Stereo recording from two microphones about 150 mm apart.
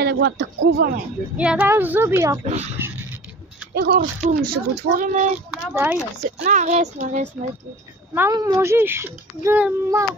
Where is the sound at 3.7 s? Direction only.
90° right.